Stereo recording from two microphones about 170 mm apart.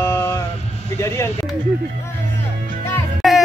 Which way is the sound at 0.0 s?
15° left (ahead or behind).